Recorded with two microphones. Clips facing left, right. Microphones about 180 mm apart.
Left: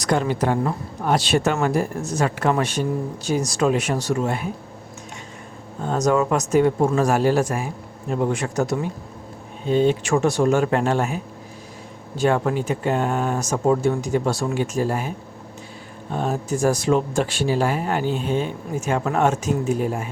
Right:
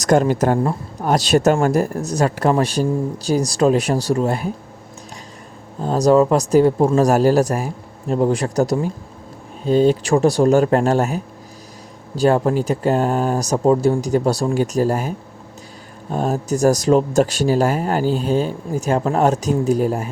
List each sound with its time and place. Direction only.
0.0 s a woman's voice: 45° right (ahead or behind)
5.8 s speech: 35° right (ahead or behind)
16.1 s speech: 40° right (ahead or behind)